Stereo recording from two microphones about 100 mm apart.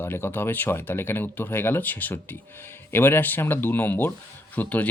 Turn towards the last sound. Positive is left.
turn(degrees=15)  # may be behind; listen again after turning